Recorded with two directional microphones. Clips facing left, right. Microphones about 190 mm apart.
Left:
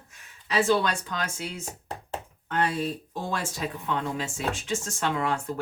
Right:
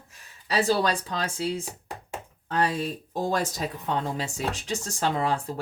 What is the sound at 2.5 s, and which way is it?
Speech, 35° right (ahead or behind).